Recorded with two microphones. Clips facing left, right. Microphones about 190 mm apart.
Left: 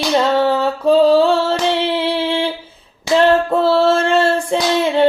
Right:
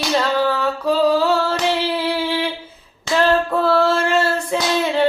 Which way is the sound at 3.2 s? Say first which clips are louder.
Left 4 dB; 25° left (ahead or behind).